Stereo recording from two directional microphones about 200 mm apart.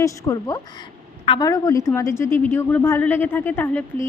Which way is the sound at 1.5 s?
15° left (ahead or behind).